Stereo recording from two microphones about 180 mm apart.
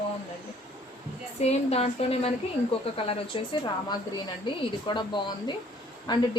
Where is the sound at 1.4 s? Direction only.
35° left (ahead or behind).